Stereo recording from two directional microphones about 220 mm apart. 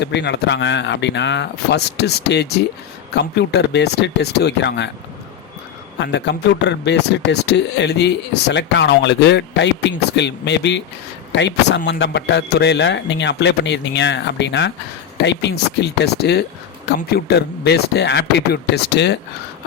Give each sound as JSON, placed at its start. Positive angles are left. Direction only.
{"t": 0.0, "sound": "speech", "side_deg": 50}
{"t": 6.0, "sound": "speech", "side_deg": 55}